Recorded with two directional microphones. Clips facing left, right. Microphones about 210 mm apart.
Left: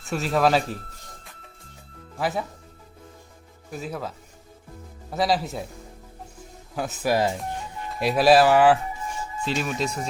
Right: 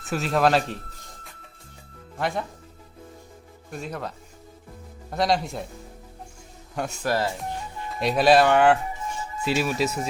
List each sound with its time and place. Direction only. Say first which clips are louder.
0.0 s speech: even; centre (ahead or behind)
2.1 s speech: left 1 dB; 5° left (ahead or behind)
3.7 s speech: left 1 dB; centre (ahead or behind)
5.1 s speech: even; centre (ahead or behind)
6.7 s speech: left 1 dB; centre (ahead or behind)
7.1 s speech: left 3 dB; 15° left (ahead or behind)
7.9 s speech: left 1 dB; centre (ahead or behind)